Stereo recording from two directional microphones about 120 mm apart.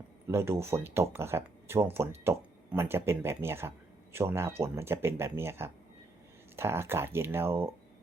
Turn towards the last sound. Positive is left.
turn(degrees=-20)  # may be behind; listen again after turning